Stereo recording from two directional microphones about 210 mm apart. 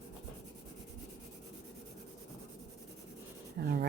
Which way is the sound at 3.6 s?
50° right (ahead or behind).